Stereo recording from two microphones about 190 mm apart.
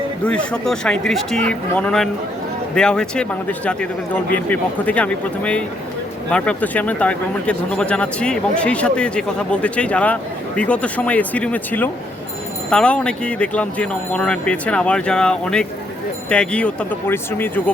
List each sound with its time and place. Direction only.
0.3 s speech: 5° left (ahead or behind)